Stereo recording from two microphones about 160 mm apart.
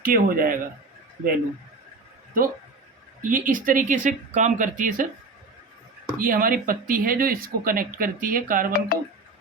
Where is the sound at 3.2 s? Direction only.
55° right (ahead or behind).